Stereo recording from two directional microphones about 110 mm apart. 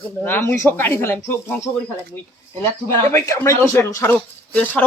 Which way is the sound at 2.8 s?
25° left (ahead or behind).